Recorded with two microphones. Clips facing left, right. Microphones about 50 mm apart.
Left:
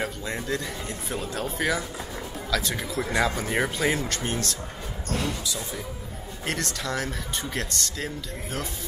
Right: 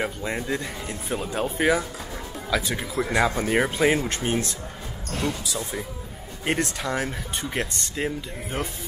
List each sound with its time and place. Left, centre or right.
0.0 s speech: centre
6.4 s speech: centre